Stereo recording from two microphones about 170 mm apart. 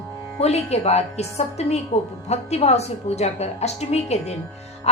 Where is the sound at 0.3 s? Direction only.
40° left (ahead or behind).